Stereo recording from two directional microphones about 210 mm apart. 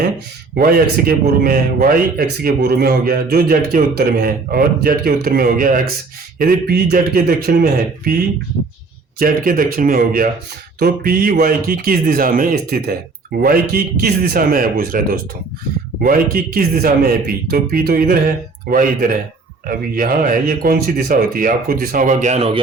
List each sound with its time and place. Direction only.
0.5 s a man's voice: 45° right (ahead or behind)
9.1 s a man's voice: 45° right (ahead or behind)